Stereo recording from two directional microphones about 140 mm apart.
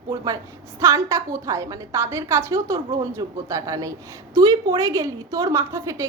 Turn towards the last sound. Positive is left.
turn(degrees=-20)  # may be behind; listen again after turning